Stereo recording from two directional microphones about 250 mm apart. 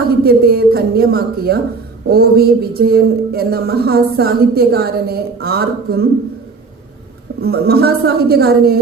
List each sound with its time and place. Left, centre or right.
0.3 s speech: right
7.4 s speech: right